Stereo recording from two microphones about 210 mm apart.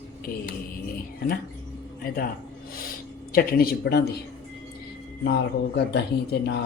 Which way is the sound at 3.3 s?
45° left (ahead or behind).